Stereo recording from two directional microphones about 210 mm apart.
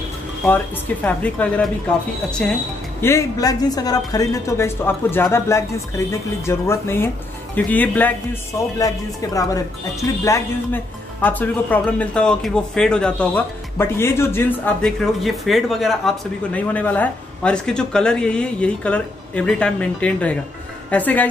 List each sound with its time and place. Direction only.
1.0 s a woman's voice: 5° left (ahead or behind)
3.0 s a woman's voice: 15° left (ahead or behind)